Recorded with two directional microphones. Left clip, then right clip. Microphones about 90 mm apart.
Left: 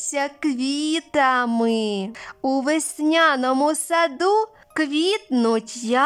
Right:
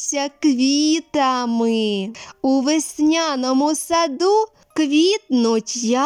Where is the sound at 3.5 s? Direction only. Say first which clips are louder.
Right 2 dB; 30° right (ahead or behind).